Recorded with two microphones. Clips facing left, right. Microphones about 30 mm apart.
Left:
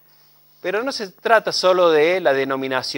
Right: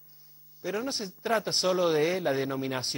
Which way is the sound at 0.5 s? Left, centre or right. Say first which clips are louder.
Left 9 dB; left.